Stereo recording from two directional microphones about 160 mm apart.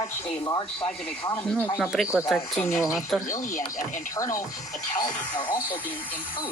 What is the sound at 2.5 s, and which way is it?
Speech, 20° left (ahead or behind).